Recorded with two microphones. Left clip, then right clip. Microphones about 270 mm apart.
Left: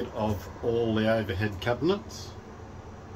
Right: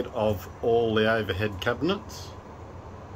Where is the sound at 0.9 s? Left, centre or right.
Centre.